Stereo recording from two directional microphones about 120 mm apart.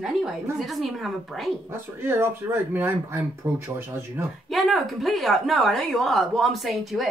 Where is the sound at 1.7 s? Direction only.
20° right (ahead or behind).